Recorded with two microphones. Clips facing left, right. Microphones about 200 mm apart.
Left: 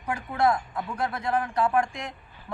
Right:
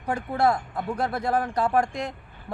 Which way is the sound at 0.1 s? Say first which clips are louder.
Right 1 dB; 35° right (ahead or behind).